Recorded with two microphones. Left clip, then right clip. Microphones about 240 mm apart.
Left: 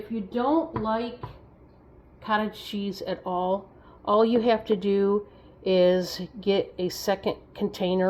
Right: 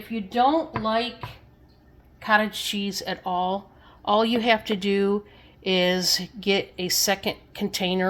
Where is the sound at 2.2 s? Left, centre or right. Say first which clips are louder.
Right 6 dB; right.